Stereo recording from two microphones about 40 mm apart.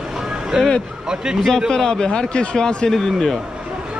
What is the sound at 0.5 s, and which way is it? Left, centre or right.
Speech, centre.